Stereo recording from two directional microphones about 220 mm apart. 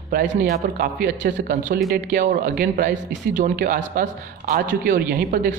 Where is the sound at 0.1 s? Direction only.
35° right (ahead or behind).